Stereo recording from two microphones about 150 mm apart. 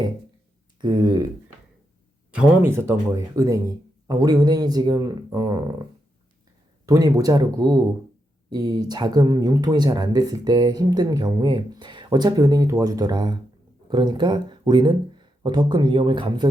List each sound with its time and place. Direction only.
0.8 s speech: 30° right (ahead or behind)
2.6 s speech: 15° right (ahead or behind)
6.8 s speech: 25° right (ahead or behind)